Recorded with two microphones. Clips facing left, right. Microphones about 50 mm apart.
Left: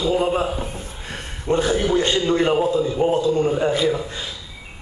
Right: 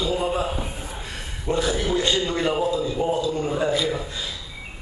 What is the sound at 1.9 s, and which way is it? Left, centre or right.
A man's voice, left.